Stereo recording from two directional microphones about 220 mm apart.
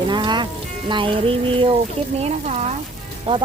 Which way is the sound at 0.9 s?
20° right (ahead or behind).